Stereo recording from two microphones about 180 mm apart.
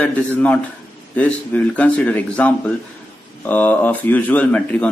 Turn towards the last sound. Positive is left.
turn(degrees=5)  # may be behind; listen again after turning